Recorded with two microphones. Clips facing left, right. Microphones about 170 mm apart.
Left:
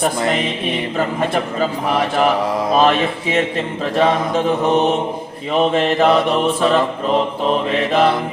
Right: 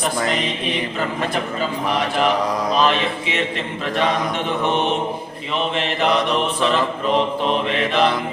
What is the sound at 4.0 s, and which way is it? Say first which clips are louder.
Mantra: left 6 dB; 30° left (ahead or behind).